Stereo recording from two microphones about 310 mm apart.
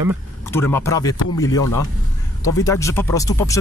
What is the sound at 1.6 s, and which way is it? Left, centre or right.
Speech, left.